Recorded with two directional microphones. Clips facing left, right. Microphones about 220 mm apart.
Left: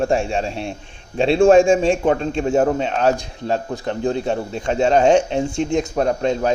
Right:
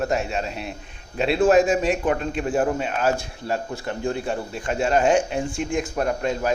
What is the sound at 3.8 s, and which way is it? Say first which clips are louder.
Speech: left 5 dB; 25° left (ahead or behind).